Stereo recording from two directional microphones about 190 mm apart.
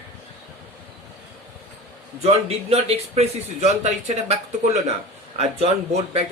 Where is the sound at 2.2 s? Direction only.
35° right (ahead or behind).